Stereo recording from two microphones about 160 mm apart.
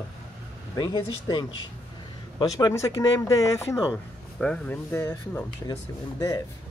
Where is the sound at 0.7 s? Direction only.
25° left (ahead or behind).